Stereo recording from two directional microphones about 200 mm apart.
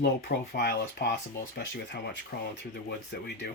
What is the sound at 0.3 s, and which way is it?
Speech, 50° left (ahead or behind).